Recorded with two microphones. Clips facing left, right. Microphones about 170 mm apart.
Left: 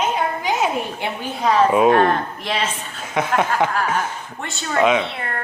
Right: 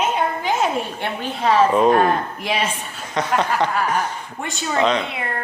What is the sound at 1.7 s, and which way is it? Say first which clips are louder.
Speech: left 1 dB; 10° left (ahead or behind).